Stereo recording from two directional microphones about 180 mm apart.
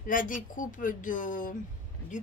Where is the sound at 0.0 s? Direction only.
50° left (ahead or behind).